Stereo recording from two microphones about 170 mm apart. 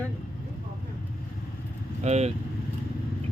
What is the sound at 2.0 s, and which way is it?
Speech, 40° right (ahead or behind).